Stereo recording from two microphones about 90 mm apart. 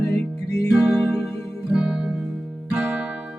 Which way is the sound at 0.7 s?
5° right (ahead or behind).